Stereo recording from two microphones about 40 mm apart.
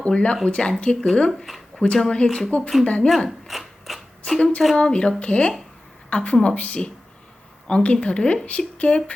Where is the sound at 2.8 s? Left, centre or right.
Left.